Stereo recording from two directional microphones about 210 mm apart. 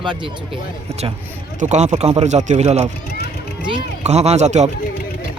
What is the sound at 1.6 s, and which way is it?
Speech, 35° right (ahead or behind).